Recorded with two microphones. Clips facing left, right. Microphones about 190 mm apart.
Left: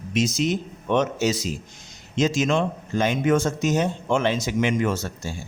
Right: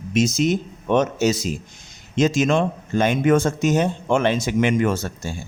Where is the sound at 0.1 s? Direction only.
45° right (ahead or behind).